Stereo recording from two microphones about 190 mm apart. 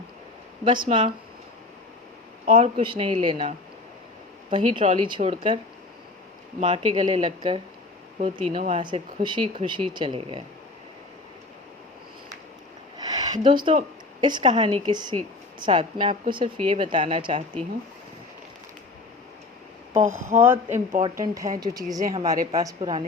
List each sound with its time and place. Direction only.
0.6 s speech: 25° right (ahead or behind)
2.5 s speech: 25° right (ahead or behind)
6.6 s speech: 30° right (ahead or behind)
8.4 s speech: 35° right (ahead or behind)
8.8 s speech: 25° right (ahead or behind)
13.0 s a sound: 20° right (ahead or behind)
14.2 s speech: 25° right (ahead or behind)
20.1 s speech: 15° right (ahead or behind)